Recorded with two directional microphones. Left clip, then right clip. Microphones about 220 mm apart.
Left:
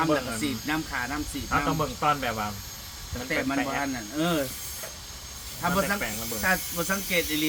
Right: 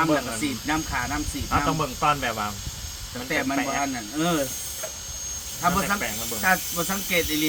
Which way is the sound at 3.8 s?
5° right (ahead or behind).